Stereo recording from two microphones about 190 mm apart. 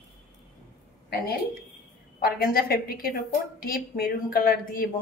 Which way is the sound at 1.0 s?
55° left (ahead or behind).